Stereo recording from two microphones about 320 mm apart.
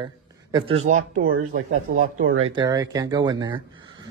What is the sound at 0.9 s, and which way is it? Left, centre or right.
Speech, right.